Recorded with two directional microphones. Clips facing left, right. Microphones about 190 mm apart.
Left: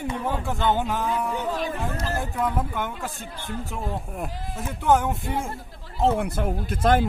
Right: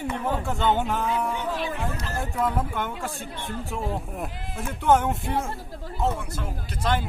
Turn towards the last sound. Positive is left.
turn(degrees=55)  # may be behind; listen again after turning